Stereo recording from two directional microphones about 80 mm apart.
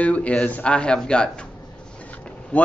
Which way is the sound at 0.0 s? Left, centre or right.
Centre.